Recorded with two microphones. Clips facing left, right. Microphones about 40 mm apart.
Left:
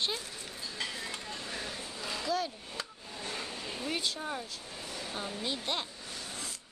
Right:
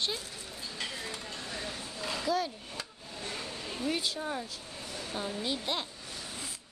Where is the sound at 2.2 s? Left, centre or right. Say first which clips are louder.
Right 2 dB; centre.